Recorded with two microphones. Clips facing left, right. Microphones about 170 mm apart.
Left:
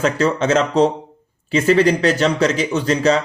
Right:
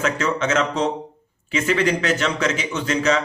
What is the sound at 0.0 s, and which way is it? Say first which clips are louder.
Speech: left 5 dB; 35° left (ahead or behind).